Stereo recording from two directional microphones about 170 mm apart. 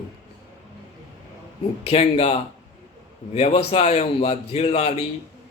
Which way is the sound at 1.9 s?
35° left (ahead or behind).